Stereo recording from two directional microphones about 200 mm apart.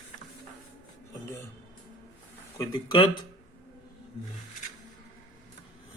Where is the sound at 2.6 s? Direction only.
20° left (ahead or behind).